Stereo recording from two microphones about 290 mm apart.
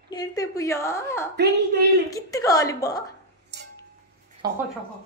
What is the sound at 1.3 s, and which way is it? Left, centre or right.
Speech, right.